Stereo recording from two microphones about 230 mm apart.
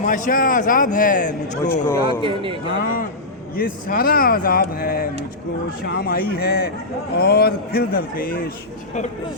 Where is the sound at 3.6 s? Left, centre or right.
Left.